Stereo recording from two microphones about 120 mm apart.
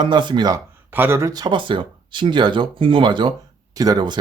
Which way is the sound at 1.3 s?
40° right (ahead or behind).